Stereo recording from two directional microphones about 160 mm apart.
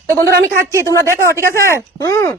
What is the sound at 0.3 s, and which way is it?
Speech, 90° right.